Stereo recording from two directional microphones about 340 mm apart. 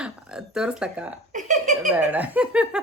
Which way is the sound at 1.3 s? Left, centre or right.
Right.